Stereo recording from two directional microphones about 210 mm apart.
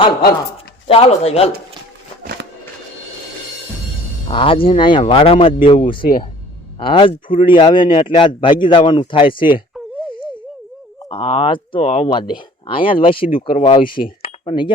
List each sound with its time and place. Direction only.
0.9 s speech: 30° left (ahead or behind)
4.3 s speech: 25° left (ahead or behind)
11.1 s speech: 25° left (ahead or behind)